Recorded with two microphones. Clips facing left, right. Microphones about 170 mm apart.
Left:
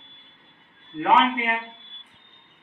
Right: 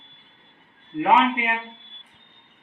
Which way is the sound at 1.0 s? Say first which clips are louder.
Right 1 dB; 20° right (ahead or behind).